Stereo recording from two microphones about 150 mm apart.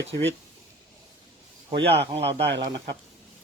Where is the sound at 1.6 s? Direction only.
40° right (ahead or behind).